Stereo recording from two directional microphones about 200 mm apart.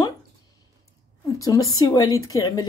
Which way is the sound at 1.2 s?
15° left (ahead or behind).